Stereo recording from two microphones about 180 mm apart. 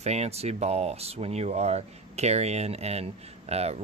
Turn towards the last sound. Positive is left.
turn(degrees=-35)  # may be behind; listen again after turning